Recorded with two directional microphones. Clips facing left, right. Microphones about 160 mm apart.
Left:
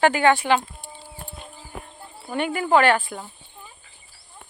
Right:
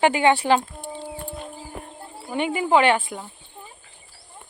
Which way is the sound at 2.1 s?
15° right (ahead or behind).